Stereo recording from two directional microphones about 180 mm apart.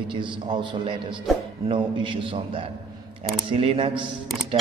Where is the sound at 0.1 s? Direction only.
25° right (ahead or behind).